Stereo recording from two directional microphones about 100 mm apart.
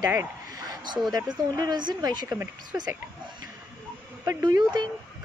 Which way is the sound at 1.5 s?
40° right (ahead or behind).